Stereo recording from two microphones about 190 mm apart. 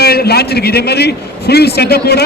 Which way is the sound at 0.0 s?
55° left (ahead or behind).